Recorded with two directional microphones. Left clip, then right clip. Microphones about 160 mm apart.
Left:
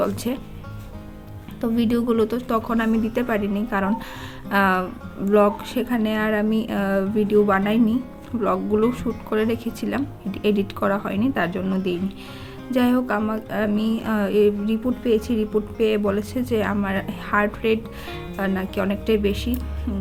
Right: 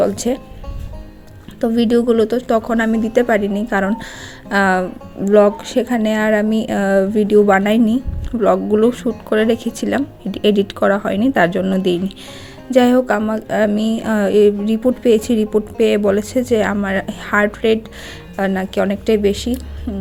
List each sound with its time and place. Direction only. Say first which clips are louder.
0.0 s a woman's voice: right 8 dB; 30° right (ahead or behind)
1.6 s a woman's voice: right 8 dB; 30° right (ahead or behind)
19.9 s music: right 4 dB; 15° right (ahead or behind)